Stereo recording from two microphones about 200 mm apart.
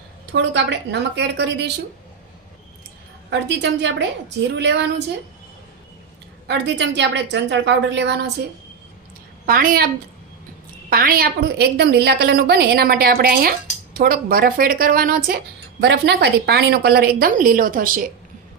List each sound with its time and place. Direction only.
0.3 s a woman's voice: 60° right (ahead or behind)
3.2 s a woman's voice: 60° right (ahead or behind)
6.5 s a woman's voice: 60° right (ahead or behind)
9.5 s a woman's voice: 45° right (ahead or behind)